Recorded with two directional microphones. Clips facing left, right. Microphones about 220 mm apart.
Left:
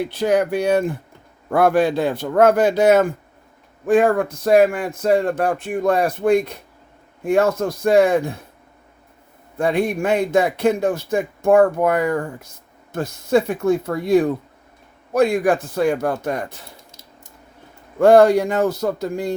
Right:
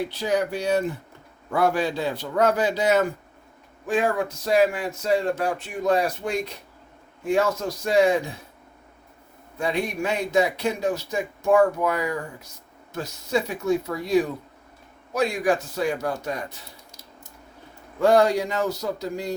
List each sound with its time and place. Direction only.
0.1 s speech: 50° left (ahead or behind)
9.6 s speech: 55° left (ahead or behind)
18.0 s speech: 55° left (ahead or behind)